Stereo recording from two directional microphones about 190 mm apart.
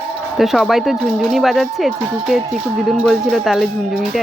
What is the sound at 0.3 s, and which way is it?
Speech, centre (ahead or behind).